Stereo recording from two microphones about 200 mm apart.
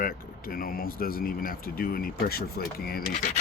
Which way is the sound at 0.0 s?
45° left (ahead or behind).